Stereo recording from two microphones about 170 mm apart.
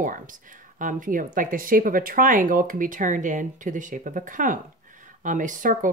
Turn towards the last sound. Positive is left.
turn(degrees=-50)  # may be behind; listen again after turning